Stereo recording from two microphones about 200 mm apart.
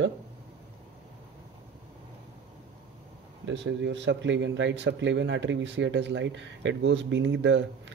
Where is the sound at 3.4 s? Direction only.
65° right (ahead or behind).